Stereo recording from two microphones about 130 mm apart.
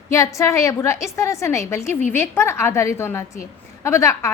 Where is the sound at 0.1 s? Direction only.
25° left (ahead or behind).